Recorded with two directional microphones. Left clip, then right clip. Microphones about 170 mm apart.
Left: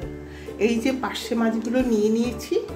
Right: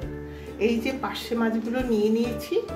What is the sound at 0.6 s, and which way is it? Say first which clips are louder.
Speech: left 3 dB; 20° left (ahead or behind).